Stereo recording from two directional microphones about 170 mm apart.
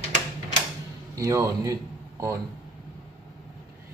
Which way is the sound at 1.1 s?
20° right (ahead or behind).